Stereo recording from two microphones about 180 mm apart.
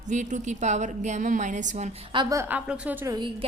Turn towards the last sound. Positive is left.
turn(degrees=-10)  # may be behind; listen again after turning